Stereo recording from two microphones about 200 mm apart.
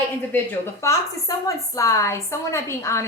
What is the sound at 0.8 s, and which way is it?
A woman's voice, 15° left (ahead or behind).